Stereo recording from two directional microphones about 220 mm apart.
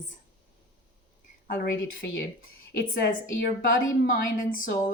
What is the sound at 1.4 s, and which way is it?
A woman's voice, 45° left (ahead or behind).